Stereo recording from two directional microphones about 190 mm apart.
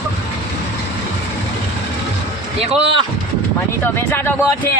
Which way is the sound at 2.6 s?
30° right (ahead or behind).